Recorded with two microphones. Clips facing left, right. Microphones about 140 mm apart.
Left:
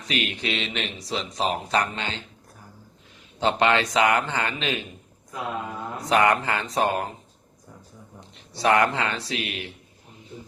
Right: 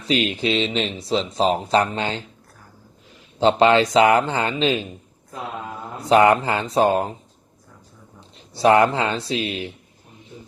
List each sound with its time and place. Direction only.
0.0 s speech: 30° right (ahead or behind)
3.4 s speech: 30° right (ahead or behind)
6.0 s speech: 30° right (ahead or behind)
8.5 s speech: 30° right (ahead or behind)